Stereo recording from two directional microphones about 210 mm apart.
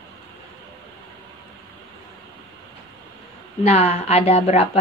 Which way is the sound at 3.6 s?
30° left (ahead or behind).